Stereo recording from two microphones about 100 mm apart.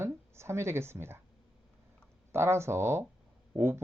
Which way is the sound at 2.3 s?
25° right (ahead or behind).